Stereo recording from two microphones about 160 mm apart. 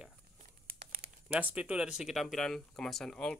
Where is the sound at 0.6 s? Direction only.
65° right (ahead or behind).